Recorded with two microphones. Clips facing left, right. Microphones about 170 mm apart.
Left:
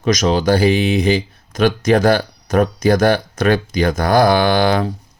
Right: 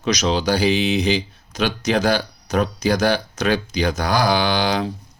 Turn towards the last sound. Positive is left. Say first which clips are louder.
# left 5 dB
turn(degrees=50)  # may be behind; listen again after turning